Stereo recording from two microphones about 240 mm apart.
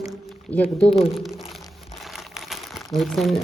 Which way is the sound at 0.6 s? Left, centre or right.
Left.